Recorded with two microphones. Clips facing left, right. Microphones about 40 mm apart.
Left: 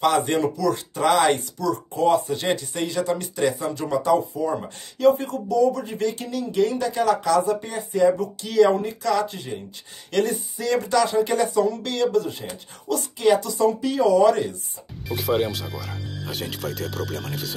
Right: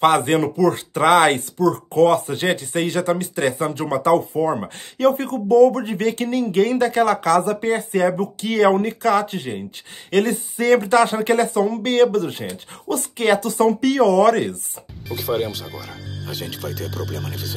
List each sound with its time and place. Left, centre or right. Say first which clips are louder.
0.0 s speech: right 4 dB; right
2.0 s speech: right 4 dB; right
13.7 s speech: right 2 dB; right
15.0 s speech: even; centre